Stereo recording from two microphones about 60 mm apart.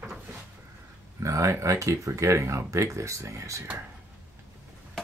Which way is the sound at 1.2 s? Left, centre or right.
Right.